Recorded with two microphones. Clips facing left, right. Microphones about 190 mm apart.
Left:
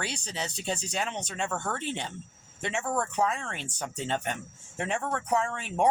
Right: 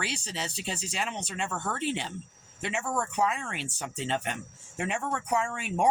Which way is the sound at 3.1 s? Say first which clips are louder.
Even; 10° right (ahead or behind).